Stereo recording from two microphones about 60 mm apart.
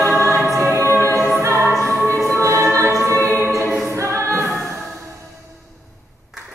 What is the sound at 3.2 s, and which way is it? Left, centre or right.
Music, left.